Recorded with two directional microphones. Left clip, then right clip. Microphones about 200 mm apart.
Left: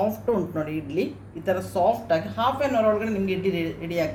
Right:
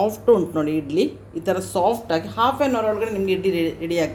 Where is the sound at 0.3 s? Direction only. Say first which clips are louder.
Right 8 dB; 40° right (ahead or behind).